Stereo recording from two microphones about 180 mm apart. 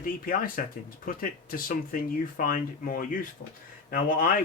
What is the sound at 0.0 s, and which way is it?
Speech, 50° left (ahead or behind).